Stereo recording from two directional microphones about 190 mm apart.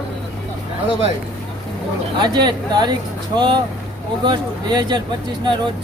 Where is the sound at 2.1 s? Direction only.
25° right (ahead or behind).